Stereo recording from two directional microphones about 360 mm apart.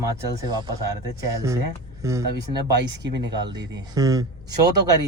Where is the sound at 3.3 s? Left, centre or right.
Centre.